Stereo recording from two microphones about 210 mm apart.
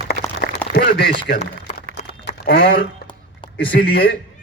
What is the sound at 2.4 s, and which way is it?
Speech, 50° left (ahead or behind).